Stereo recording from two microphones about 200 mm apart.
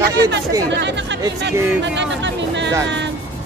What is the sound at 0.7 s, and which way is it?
Speech, 60° right (ahead or behind).